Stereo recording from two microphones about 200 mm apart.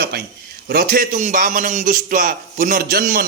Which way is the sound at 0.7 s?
50° right (ahead or behind).